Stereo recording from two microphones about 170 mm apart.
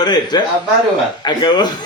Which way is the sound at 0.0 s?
25° left (ahead or behind).